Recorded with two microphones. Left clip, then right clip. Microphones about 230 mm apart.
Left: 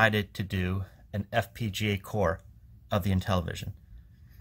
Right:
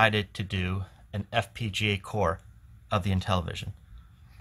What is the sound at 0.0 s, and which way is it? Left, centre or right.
Speech, centre.